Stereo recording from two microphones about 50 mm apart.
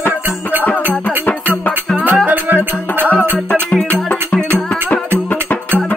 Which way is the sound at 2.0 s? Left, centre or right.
Right.